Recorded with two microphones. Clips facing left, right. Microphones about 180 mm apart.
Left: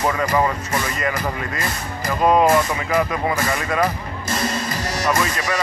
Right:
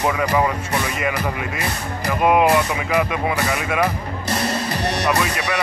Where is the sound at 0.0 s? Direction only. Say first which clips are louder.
Even; 10° right (ahead or behind).